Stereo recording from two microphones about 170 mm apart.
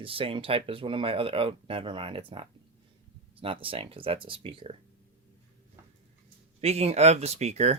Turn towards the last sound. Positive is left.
turn(degrees=-40)  # may be behind; listen again after turning